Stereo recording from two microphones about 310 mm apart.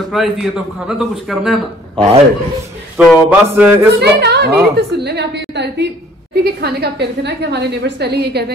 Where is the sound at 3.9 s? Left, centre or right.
Right.